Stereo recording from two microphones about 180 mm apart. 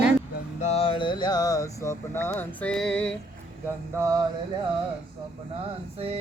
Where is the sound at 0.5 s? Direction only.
35° left (ahead or behind); by 3.2 s 5° left (ahead or behind).